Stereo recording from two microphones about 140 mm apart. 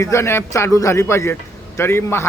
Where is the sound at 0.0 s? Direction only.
20° left (ahead or behind).